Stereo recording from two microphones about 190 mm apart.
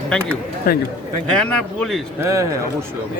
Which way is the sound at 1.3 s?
5° left (ahead or behind).